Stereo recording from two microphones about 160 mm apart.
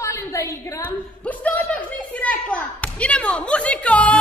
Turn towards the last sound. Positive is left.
turn(degrees=10)  # may be behind; listen again after turning